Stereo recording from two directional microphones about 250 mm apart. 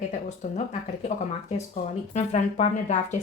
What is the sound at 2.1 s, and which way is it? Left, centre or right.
Speech, left.